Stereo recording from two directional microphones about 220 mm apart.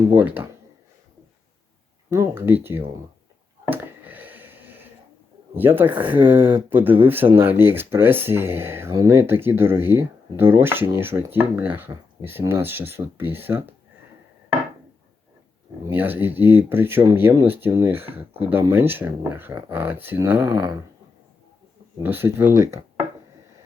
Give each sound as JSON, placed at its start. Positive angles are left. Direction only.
{"t": 0.1, "sound": "speech", "side_deg": -10}
{"t": 2.0, "sound": "speech", "side_deg": -10}
{"t": 3.7, "sound": "a sound", "side_deg": -10}
{"t": 5.5, "sound": "speech", "side_deg": -10}
{"t": 5.9, "sound": "speech", "side_deg": -20}
{"t": 6.5, "sound": "speech", "side_deg": -10}
{"t": 15.8, "sound": "speech", "side_deg": -10}
{"t": 22.0, "sound": "speech", "side_deg": -10}